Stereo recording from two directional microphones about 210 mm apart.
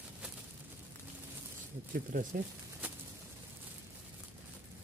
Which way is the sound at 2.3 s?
5° right (ahead or behind).